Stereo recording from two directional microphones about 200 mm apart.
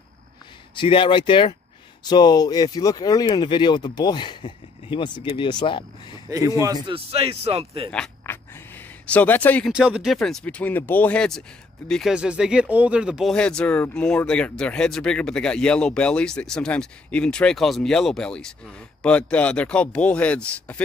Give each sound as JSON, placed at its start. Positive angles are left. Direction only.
{"t": 0.7, "sound": "speech", "side_deg": 25}
{"t": 6.6, "sound": "speech", "side_deg": -20}
{"t": 7.9, "sound": "a sound", "side_deg": 5}
{"t": 9.7, "sound": "speech", "side_deg": -5}